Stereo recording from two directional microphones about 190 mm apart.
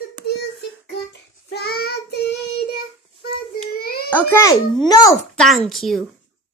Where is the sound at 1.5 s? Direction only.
55° left (ahead or behind).